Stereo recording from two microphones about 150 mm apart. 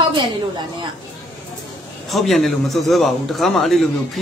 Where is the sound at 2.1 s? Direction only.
Centre (ahead or behind).